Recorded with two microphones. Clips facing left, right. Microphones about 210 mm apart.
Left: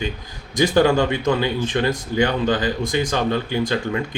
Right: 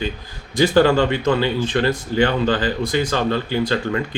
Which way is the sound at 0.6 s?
15° left (ahead or behind).